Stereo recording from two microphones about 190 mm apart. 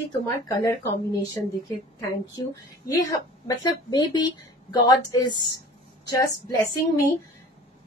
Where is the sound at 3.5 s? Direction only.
20° left (ahead or behind).